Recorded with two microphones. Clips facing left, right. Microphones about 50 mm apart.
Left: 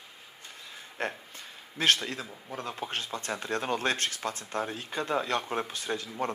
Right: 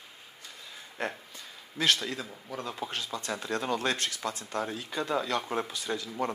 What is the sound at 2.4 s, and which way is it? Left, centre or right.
Speech, left.